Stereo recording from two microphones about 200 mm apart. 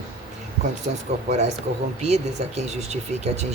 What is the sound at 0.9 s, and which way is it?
Speech, 45° right (ahead or behind).